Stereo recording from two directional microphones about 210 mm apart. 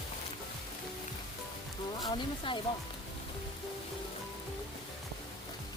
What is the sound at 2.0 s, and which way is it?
Speech, 25° left (ahead or behind).